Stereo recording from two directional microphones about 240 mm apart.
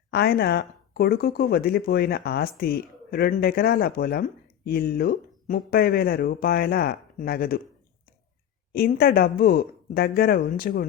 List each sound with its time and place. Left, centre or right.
0.1 s speech: left
8.7 s speech: left